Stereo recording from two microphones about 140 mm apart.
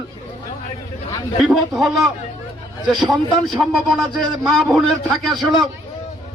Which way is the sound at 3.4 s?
Centre (ahead or behind).